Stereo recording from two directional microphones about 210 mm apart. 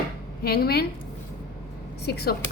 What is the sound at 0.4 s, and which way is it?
Speech, 50° left (ahead or behind).